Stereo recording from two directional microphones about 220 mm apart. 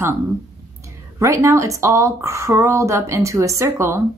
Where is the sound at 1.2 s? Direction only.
15° right (ahead or behind).